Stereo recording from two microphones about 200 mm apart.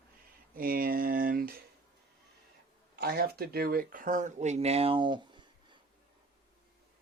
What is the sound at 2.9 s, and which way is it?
Speech, 50° right (ahead or behind).